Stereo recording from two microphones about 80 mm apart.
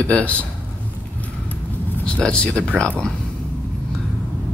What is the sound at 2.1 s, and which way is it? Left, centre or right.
Speech, centre.